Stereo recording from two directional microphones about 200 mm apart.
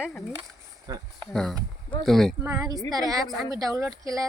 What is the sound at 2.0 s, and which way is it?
Speech, centre (ahead or behind).